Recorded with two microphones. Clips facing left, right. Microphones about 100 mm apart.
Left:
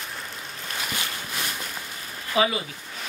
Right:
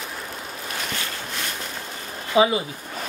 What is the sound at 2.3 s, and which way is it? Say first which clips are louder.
Speech: right 5 dB; 25° right (ahead or behind).